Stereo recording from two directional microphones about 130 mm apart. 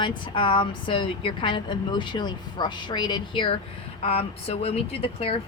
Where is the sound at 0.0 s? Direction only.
40° left (ahead or behind).